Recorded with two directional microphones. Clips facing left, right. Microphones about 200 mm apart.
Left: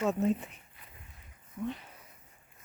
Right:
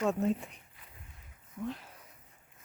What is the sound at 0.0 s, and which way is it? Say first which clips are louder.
Speech: left 1 dB; centre (ahead or behind).